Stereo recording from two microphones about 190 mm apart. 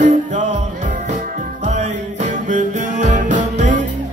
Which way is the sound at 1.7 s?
35° right (ahead or behind).